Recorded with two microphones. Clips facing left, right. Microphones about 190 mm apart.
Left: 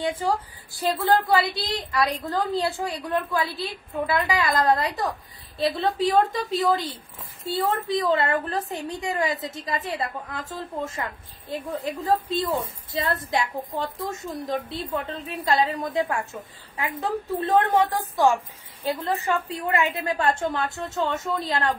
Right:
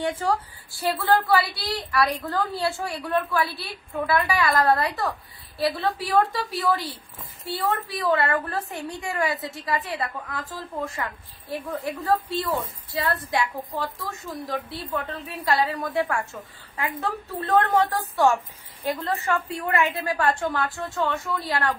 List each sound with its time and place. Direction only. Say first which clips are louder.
0.0 s a woman's voice: even; 10° left (ahead or behind)